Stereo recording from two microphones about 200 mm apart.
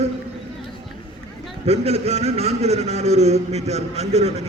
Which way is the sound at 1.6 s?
30° right (ahead or behind).